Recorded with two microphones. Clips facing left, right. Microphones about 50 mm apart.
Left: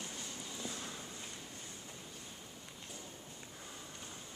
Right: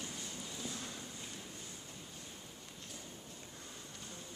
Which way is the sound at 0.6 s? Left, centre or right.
Centre.